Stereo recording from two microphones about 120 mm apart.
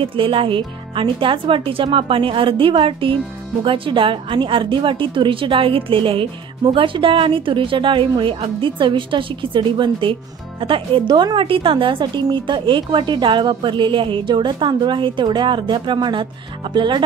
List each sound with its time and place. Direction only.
0.0 s a woman's voice: 50° right (ahead or behind)